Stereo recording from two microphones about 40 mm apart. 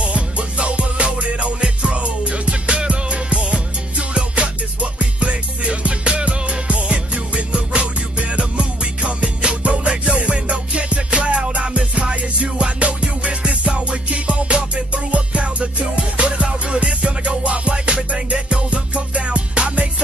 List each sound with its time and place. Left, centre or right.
0.0 s music: right